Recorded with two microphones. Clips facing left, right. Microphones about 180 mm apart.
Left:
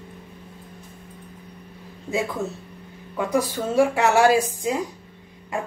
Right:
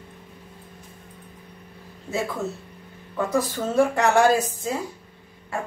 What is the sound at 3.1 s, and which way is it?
A woman's voice, 10° left (ahead or behind).